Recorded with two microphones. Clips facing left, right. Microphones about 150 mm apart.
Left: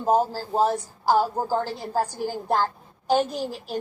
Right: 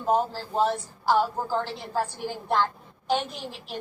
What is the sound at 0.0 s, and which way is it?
Speech, 40° left (ahead or behind).